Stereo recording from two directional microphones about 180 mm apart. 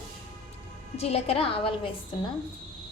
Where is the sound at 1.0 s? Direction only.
35° left (ahead or behind).